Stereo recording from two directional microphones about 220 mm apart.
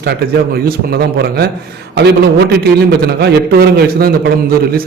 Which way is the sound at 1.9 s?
50° right (ahead or behind).